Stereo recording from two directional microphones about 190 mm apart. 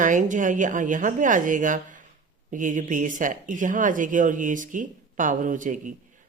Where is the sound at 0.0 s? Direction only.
40° right (ahead or behind).